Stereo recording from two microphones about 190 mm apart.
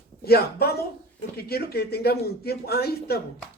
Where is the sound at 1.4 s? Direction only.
55° left (ahead or behind).